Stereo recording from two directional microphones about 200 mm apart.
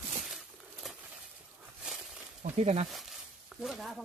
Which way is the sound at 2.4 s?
35° right (ahead or behind).